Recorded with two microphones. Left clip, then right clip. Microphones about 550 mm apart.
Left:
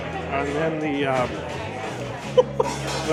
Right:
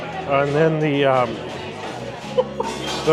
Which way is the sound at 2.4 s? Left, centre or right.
Left.